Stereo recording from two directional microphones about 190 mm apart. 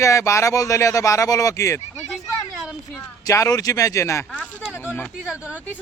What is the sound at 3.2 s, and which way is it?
Speech, 15° left (ahead or behind).